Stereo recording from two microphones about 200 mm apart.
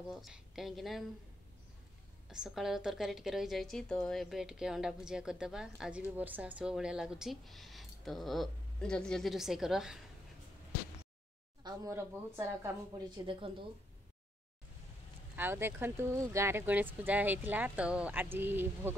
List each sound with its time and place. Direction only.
0.1 s a woman's voice: centre (ahead or behind)
2.2 s a woman's voice: centre (ahead or behind)
11.6 s speech: 15° right (ahead or behind)
13.1 s a woman's voice: 25° right (ahead or behind)
15.3 s speech: 10° right (ahead or behind)